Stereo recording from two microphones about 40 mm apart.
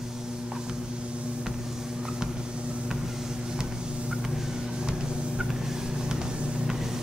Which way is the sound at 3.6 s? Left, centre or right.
Centre.